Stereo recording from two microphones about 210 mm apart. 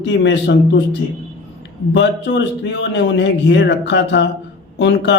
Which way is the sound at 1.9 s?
55° left (ahead or behind).